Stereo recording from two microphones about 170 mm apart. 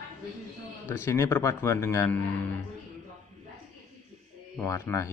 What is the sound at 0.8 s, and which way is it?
Speech, 15° left (ahead or behind).